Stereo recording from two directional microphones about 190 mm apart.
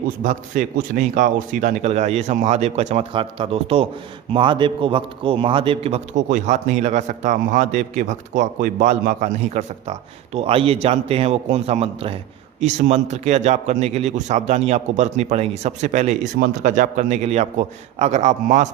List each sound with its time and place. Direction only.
0.2 s a man's voice: 45° right (ahead or behind)